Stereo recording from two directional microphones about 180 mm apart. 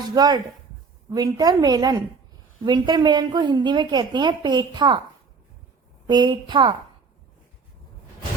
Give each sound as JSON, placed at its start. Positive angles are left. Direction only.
{"t": 0.1, "sound": "a woman's voice", "side_deg": -20}
{"t": 6.1, "sound": "a woman's voice", "side_deg": -25}